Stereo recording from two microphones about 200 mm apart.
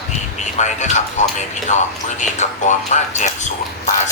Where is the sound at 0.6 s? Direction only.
35° left (ahead or behind).